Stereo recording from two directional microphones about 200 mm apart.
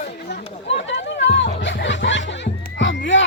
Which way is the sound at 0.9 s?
65° left (ahead or behind).